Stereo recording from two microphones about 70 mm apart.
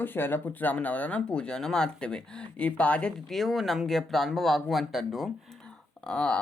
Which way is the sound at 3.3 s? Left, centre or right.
Centre.